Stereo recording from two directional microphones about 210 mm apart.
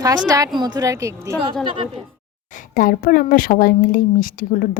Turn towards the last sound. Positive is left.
turn(degrees=40)  # may be behind; listen again after turning